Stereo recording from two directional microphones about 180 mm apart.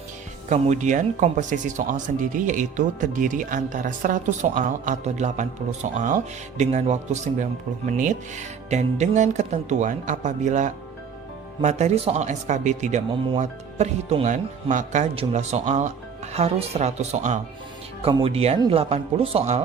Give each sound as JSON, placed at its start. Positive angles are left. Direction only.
{"t": 0.5, "sound": "speech", "side_deg": -40}